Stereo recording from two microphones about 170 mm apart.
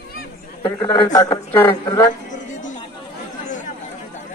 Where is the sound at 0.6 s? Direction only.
20° left (ahead or behind).